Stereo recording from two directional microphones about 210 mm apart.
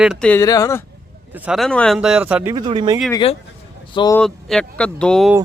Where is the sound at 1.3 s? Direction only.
5° right (ahead or behind).